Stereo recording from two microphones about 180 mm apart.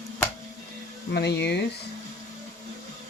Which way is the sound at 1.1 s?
70° left (ahead or behind).